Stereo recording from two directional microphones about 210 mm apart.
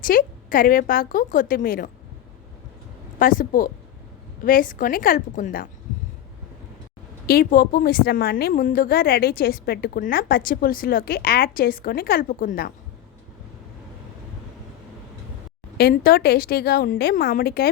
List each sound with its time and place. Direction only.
0.0 s speech: 40° left (ahead or behind)
3.2 s speech: 40° left (ahead or behind)
7.3 s a woman's voice: 45° left (ahead or behind)
15.8 s a woman's voice: 45° left (ahead or behind)